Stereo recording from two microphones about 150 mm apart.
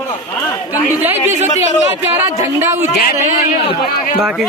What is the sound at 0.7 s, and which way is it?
Speech, 10° right (ahead or behind).